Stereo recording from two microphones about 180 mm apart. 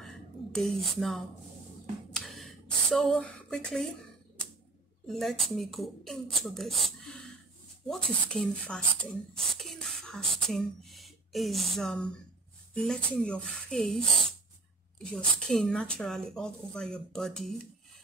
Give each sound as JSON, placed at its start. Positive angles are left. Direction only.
{"t": 0.0, "sound": "a sound", "side_deg": 0}
{"t": 5.0, "sound": "speech", "side_deg": 0}
{"t": 7.9, "sound": "speech", "side_deg": 5}
{"t": 9.5, "sound": "whispering", "side_deg": 0}
{"t": 12.7, "sound": "speech", "side_deg": 5}
{"t": 15.0, "sound": "speech", "side_deg": 5}